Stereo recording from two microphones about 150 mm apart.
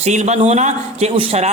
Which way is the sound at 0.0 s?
50° right (ahead or behind).